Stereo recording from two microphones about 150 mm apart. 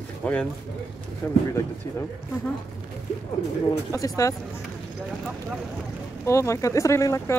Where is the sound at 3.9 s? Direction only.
20° left (ahead or behind).